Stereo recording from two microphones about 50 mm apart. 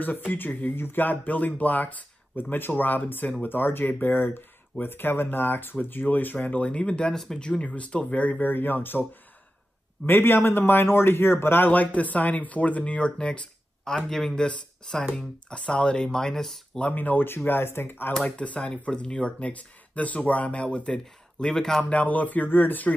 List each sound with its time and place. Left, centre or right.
0.0 s speech: left
0.7 s speech: left
1.0 s speech: left
6.3 s speech: left
10.0 s speech: left
11.7 s speech: left
13.8 s speech: centre
16.9 s speech: left
17.5 s speech: left
18.2 s speech: left
21.9 s speech: left